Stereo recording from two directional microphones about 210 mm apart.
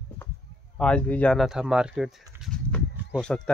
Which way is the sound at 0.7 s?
5° left (ahead or behind).